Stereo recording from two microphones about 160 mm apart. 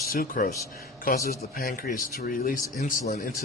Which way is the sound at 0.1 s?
65° left (ahead or behind).